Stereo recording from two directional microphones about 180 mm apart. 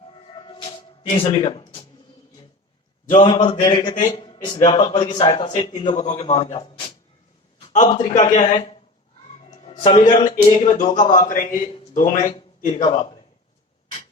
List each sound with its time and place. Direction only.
0.3 s music: 25° left (ahead or behind)
1.0 s speech: 35° left (ahead or behind)
3.1 s a man's voice: 30° left (ahead or behind)
7.7 s a man's voice: 45° left (ahead or behind)
12.8 s a man's voice: 30° left (ahead or behind)